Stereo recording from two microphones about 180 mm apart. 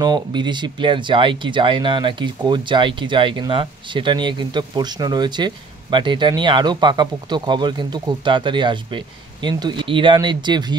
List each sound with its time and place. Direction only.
0.0 s speech: 25° right (ahead or behind)